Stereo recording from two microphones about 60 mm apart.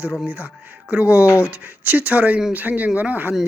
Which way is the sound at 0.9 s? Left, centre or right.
Right.